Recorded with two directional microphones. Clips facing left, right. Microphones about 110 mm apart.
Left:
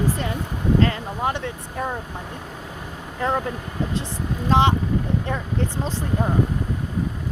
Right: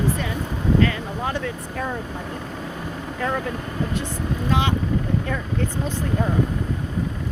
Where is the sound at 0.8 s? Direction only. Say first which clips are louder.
Left 1 dB; 25° left (ahead or behind).